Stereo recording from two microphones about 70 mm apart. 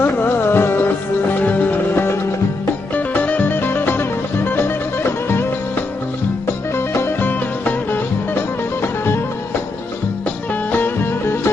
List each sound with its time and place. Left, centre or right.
0.0 s music: left
6.7 s music: left
10.7 s music: left